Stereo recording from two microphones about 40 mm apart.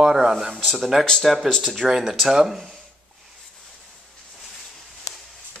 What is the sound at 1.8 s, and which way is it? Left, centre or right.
Speech, centre.